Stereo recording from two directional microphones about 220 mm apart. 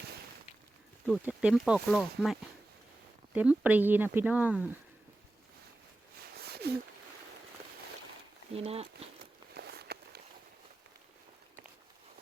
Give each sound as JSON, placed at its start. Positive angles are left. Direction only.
{"t": 1.0, "sound": "speech", "side_deg": -5}
{"t": 6.3, "sound": "a sound", "side_deg": -45}
{"t": 8.5, "sound": "speech", "side_deg": -25}
{"t": 9.6, "sound": "walk", "side_deg": -45}